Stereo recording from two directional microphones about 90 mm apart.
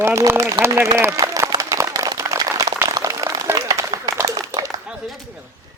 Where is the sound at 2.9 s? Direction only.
40° right (ahead or behind).